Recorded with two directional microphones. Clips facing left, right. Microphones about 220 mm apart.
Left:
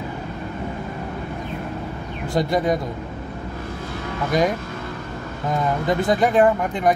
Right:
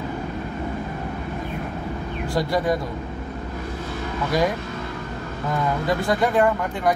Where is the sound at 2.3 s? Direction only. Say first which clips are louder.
Left 2 dB; 20° left (ahead or behind).